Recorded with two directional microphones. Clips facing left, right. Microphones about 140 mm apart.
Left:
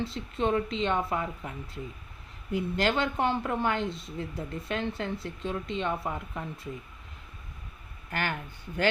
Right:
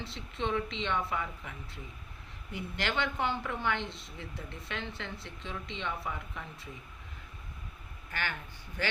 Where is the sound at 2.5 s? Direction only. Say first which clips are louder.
Left 7 dB; 40° left (ahead or behind).